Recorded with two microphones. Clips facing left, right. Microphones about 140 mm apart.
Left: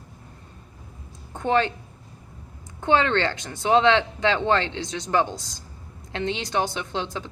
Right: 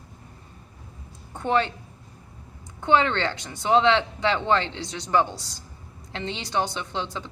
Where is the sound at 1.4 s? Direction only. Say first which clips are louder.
Left 2 dB; 55° left (ahead or behind).